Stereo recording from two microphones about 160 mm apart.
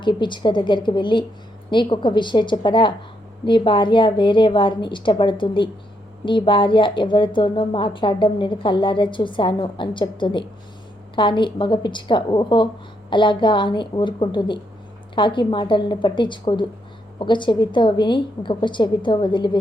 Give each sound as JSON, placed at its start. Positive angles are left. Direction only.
{"t": 0.0, "sound": "a woman's voice", "side_deg": 30}